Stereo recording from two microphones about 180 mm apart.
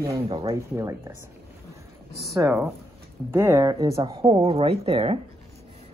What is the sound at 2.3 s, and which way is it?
Speech, 15° right (ahead or behind).